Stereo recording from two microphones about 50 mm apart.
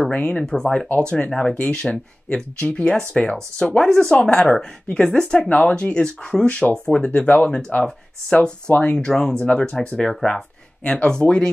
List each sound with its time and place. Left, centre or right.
0.1 s speech: left
0.5 s speech: centre
0.9 s speech: centre
9.4 s speech: left